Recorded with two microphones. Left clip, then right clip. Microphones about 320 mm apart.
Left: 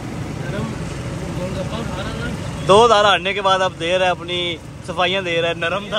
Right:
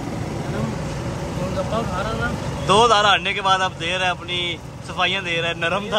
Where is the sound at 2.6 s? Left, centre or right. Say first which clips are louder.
Left 3 dB; centre.